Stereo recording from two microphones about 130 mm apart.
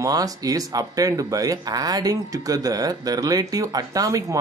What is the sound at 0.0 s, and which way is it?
Speech, 25° right (ahead or behind).